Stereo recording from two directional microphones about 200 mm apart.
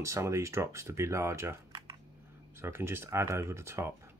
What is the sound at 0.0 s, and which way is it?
Speech, 15° right (ahead or behind).